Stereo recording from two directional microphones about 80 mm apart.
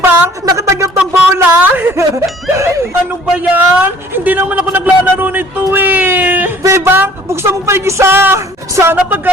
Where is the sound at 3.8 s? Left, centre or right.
Right.